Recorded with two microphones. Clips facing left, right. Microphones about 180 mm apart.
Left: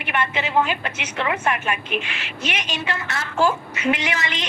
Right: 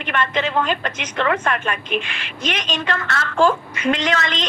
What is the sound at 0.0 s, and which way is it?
A woman's voice, 10° left (ahead or behind).